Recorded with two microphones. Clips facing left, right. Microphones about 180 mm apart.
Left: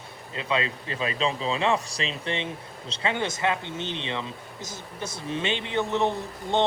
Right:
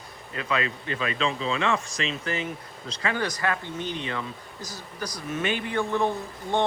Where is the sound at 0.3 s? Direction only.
25° left (ahead or behind).